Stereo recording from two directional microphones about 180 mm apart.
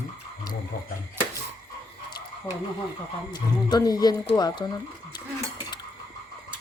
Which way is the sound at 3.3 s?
20° left (ahead or behind).